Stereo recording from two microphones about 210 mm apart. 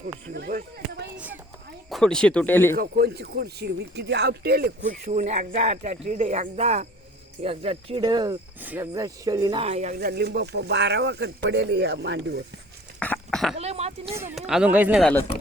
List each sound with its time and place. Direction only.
0.3 s speech: 45° right (ahead or behind)
1.1 s speech: 5° right (ahead or behind); by 2.7 s 10° left (ahead or behind)
2.7 s speech: 45° right (ahead or behind); by 8.4 s 20° right (ahead or behind)
8.6 s speech: 10° right (ahead or behind); by 10.0 s 30° right (ahead or behind)
10.0 s speech: 50° right (ahead or behind)
13.0 s a sound: 5° left (ahead or behind)
13.6 s speech: 30° right (ahead or behind)
14.1 s speech: 10° right (ahead or behind)
14.3 s speech: centre (ahead or behind)